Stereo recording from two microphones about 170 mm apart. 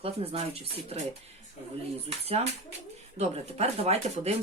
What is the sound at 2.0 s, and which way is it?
Speech, 35° right (ahead or behind).